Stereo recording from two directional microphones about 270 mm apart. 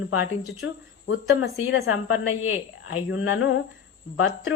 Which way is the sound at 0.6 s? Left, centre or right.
Left.